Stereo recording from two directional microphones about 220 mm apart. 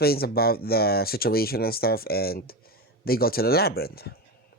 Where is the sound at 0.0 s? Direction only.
45° left (ahead or behind).